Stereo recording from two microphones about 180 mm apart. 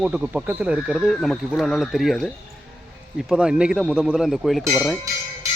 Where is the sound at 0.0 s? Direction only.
5° right (ahead or behind).